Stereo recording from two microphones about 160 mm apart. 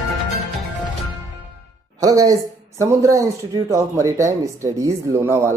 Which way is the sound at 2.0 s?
20° right (ahead or behind).